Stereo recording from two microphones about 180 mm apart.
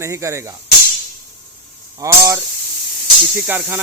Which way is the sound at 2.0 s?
15° right (ahead or behind).